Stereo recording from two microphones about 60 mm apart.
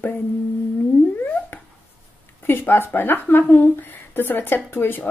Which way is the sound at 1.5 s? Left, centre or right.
Left.